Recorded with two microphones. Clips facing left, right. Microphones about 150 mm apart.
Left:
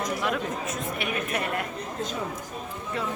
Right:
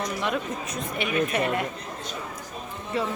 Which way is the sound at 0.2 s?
Centre (ahead or behind).